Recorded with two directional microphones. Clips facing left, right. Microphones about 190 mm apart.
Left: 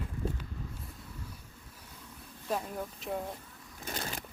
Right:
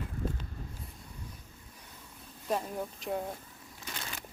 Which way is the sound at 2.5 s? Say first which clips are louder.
Right 2 dB; centre (ahead or behind).